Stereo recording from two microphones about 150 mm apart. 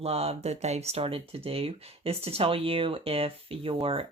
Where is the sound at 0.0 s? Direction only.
40° right (ahead or behind).